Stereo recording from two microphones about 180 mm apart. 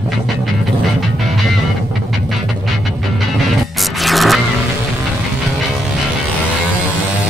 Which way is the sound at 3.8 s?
Centre (ahead or behind).